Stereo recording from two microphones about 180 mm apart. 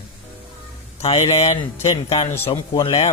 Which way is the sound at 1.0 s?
35° left (ahead or behind).